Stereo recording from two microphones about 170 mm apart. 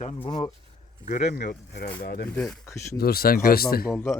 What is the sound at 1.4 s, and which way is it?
Speech, 60° left (ahead or behind).